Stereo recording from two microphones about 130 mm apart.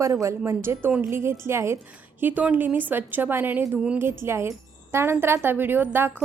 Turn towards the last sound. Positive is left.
turn(degrees=-15)  # may be behind; listen again after turning